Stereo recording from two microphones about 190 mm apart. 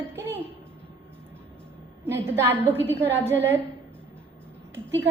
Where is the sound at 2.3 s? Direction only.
10° right (ahead or behind).